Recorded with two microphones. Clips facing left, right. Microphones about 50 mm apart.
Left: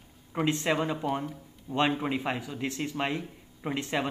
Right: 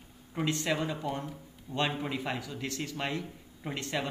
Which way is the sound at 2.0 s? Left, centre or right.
Left.